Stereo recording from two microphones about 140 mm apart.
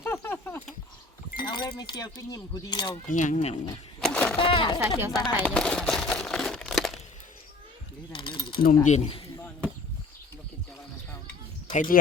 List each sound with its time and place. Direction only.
0.0 s a sound: 15° left (ahead or behind)
1.4 s speech: 30° left (ahead or behind)
3.1 s speech: 60° left (ahead or behind)
4.0 s a sound: 10° left (ahead or behind)
4.4 s speech: 35° left (ahead or behind)
4.8 s speech: 20° right (ahead or behind)
5.4 s crumpling: 5° left (ahead or behind)
8.1 s mechanisms: 35° left (ahead or behind)
8.6 s speech: 60° left (ahead or behind)
11.7 s speech: 70° left (ahead or behind)